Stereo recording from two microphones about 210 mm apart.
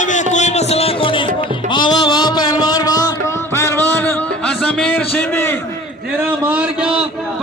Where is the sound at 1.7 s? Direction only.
20° left (ahead or behind).